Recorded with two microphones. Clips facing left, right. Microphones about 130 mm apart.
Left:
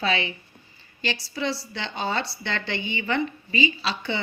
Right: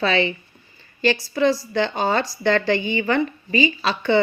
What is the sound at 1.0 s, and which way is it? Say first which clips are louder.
A woman's voice: right 10 dB; 50° right (ahead or behind).